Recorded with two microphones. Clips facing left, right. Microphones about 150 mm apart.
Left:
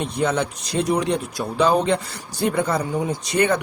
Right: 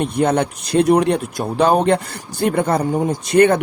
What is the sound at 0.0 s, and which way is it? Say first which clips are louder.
Speech: right 5 dB; 55° right (ahead or behind).